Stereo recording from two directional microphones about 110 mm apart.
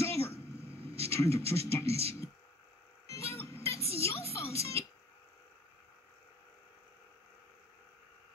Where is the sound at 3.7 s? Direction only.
65° right (ahead or behind).